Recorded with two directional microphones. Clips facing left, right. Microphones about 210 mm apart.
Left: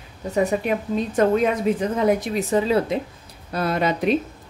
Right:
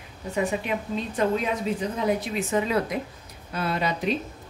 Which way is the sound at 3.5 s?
45° left (ahead or behind).